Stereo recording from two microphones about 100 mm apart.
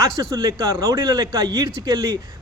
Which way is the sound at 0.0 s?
35° right (ahead or behind).